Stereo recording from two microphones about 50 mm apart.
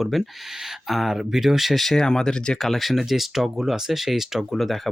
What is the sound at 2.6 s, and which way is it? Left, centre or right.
Speech, centre.